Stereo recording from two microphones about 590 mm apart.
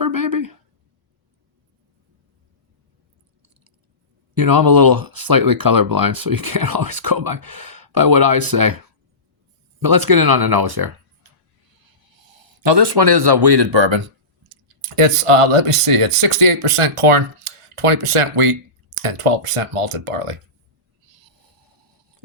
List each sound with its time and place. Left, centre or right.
0.0 s a sound: right
4.4 s speech: right
12.2 s speech: right